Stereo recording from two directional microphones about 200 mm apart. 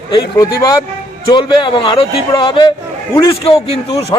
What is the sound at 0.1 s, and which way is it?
A man's voice, 20° left (ahead or behind).